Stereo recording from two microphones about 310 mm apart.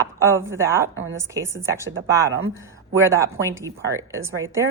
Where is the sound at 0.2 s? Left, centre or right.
Centre.